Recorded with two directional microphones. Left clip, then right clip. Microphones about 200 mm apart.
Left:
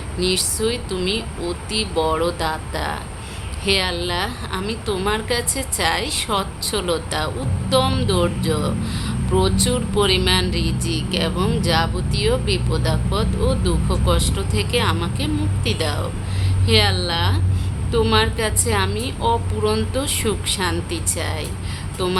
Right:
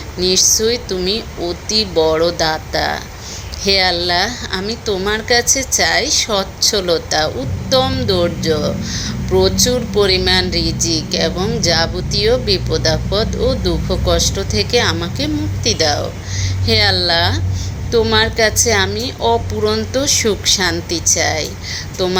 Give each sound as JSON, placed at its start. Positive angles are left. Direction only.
{"t": 0.3, "sound": "speech", "side_deg": 5}
{"t": 0.6, "sound": "a woman's voice", "side_deg": -15}
{"t": 9.0, "sound": "a sound", "side_deg": -15}
{"t": 9.6, "sound": "a woman's voice", "side_deg": -15}